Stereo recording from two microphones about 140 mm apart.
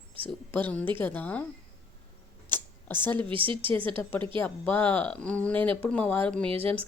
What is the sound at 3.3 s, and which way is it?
Speech, 40° right (ahead or behind).